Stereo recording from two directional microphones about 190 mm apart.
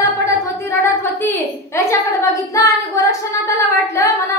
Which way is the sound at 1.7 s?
15° left (ahead or behind).